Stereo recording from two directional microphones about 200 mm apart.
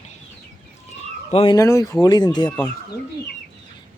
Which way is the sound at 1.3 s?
30° left (ahead or behind).